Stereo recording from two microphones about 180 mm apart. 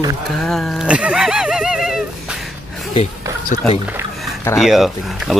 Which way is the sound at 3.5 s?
45° left (ahead or behind).